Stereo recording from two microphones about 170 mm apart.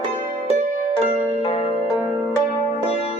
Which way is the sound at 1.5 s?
35° left (ahead or behind).